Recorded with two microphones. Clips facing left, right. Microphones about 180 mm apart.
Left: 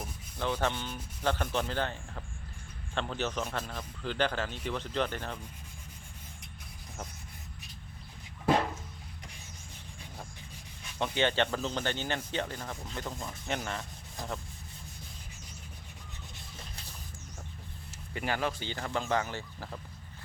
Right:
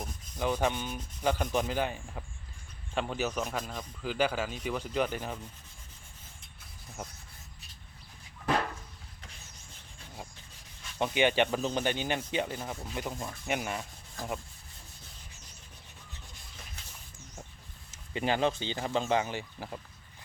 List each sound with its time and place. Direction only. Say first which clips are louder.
0.3 s speech: right 2 dB; 10° right (ahead or behind)
10.9 s speech: right 3 dB; 15° right (ahead or behind)
18.1 s speech: right 4 dB; 20° right (ahead or behind)